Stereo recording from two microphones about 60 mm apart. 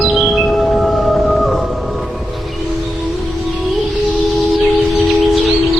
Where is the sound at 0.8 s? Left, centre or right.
Centre.